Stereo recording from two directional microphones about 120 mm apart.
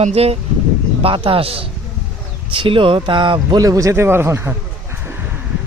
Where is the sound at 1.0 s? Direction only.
50° right (ahead or behind); by 4.5 s 20° right (ahead or behind).